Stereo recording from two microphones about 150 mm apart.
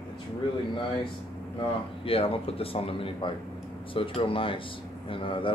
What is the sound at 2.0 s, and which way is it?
Speech, 40° left (ahead or behind).